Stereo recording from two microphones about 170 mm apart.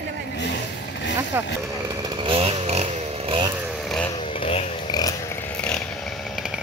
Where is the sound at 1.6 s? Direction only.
20° right (ahead or behind).